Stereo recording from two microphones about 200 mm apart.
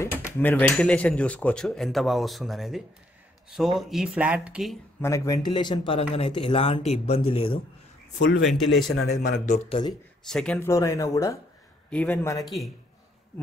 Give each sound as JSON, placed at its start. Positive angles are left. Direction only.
{"t": 0.0, "sound": "speech", "side_deg": 10}
{"t": 5.0, "sound": "speech", "side_deg": 15}
{"t": 8.5, "sound": "speech", "side_deg": 0}
{"t": 8.9, "sound": "speech", "side_deg": 55}
{"t": 9.5, "sound": "speech", "side_deg": 25}
{"t": 10.2, "sound": "speech", "side_deg": 5}